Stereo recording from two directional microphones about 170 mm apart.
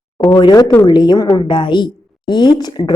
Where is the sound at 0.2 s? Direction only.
30° left (ahead or behind).